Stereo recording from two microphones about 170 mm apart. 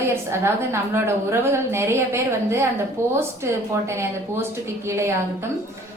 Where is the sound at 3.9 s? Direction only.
15° right (ahead or behind).